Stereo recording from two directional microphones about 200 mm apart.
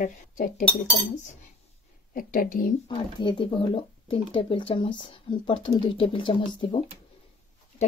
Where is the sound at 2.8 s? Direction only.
25° left (ahead or behind).